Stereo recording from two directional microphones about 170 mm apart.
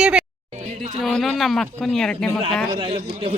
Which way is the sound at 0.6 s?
40° right (ahead or behind).